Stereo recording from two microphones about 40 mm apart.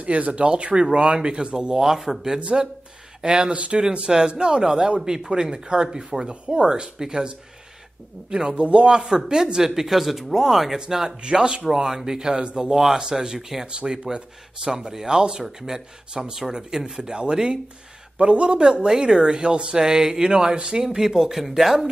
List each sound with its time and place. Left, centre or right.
0.0 s speech: right
1.8 s speech: centre
13.7 s speech: right
20.8 s speech: centre